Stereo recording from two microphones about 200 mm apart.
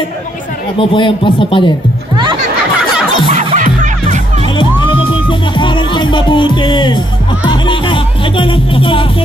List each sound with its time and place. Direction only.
0.7 s a man's voice: 25° left (ahead or behind)
3.3 s music: 25° right (ahead or behind)
3.5 s music: 40° right (ahead or behind)
4.6 s music: 25° left (ahead or behind)